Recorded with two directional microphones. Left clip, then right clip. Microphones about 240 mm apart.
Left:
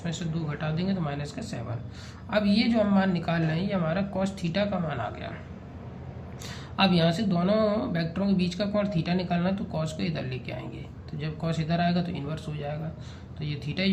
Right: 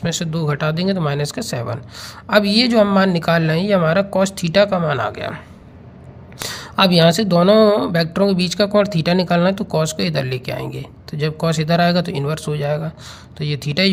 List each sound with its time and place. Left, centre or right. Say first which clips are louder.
0.0 s speech: right 13 dB; right
6.5 s speech: right 10 dB; right